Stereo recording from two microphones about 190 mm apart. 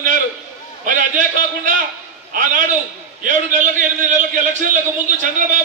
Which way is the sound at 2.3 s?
45° right (ahead or behind).